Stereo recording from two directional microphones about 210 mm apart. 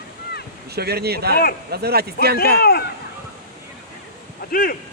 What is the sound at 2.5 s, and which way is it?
Speech, 50° left (ahead or behind).